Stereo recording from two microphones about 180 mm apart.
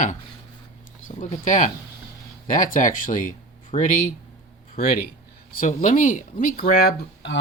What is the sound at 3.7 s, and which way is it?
Speech, 35° left (ahead or behind).